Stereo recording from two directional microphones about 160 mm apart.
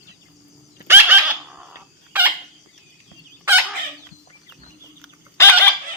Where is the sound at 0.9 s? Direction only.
15° right (ahead or behind).